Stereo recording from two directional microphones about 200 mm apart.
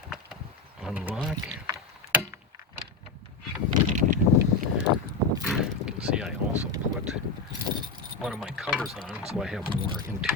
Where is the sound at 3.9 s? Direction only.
40° right (ahead or behind).